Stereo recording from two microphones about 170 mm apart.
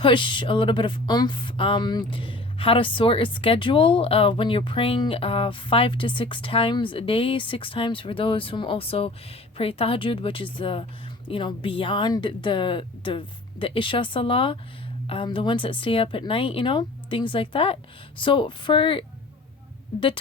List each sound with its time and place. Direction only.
0.0 s speech: 30° left (ahead or behind)